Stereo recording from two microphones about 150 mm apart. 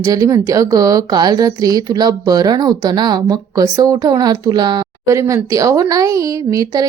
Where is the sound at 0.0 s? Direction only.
20° right (ahead or behind).